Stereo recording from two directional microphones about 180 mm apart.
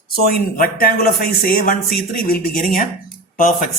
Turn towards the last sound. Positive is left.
turn(degrees=50)  # may be behind; listen again after turning